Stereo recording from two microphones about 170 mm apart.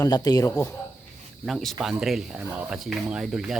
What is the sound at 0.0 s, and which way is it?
Speech, 25° left (ahead or behind).